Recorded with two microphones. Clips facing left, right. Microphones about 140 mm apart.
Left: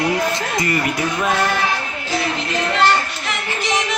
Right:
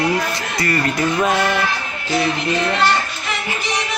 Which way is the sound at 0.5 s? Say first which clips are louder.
Right 2 dB; 20° left (ahead or behind).